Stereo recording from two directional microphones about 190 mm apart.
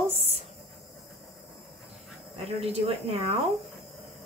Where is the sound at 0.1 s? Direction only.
35° right (ahead or behind).